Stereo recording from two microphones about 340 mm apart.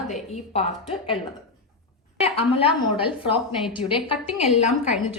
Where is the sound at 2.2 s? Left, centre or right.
Centre.